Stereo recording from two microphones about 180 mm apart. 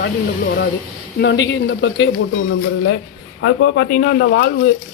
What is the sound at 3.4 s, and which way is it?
Speech, 80° left.